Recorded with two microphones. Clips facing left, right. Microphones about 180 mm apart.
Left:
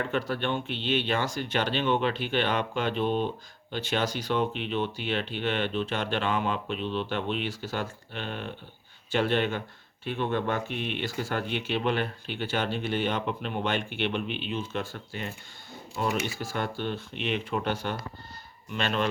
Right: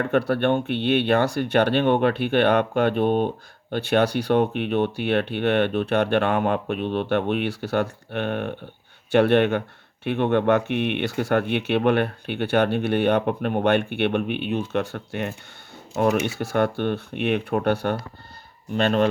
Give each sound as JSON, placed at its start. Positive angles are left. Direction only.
{"t": 0.0, "sound": "speech", "side_deg": -60}
{"t": 18.7, "sound": "speech", "side_deg": -45}